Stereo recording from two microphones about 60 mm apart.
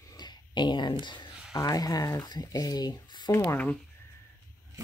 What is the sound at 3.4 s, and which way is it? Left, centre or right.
Speech, left.